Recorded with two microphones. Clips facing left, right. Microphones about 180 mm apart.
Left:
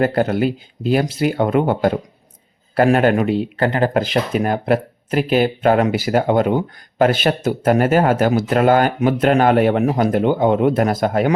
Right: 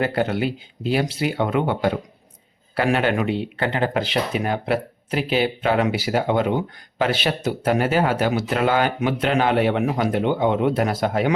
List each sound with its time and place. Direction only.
0.0 s speech: 45° left (ahead or behind)